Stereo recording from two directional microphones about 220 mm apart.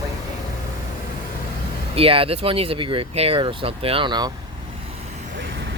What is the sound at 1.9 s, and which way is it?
Speech, 25° right (ahead or behind).